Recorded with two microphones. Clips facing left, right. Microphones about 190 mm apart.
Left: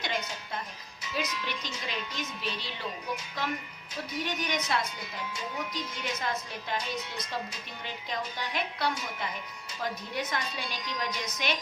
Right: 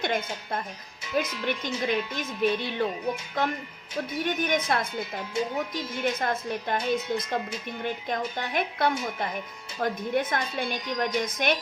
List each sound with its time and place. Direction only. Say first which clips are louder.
0.0 s speech: right 6 dB; 50° right (ahead or behind)